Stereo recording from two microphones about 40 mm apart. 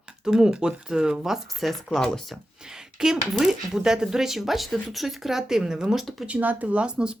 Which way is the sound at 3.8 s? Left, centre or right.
Right.